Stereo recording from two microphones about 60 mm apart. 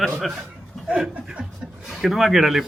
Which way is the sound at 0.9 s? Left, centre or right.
Centre.